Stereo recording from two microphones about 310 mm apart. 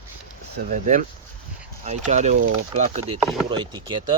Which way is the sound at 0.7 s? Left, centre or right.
Right.